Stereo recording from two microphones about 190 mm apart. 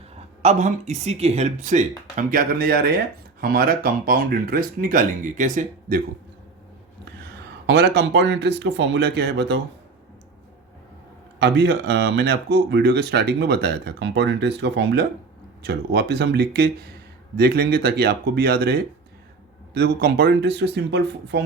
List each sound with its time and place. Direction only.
0.4 s speech: 35° right (ahead or behind)
7.7 s speech: 60° right (ahead or behind)
11.3 s speech: 65° right (ahead or behind)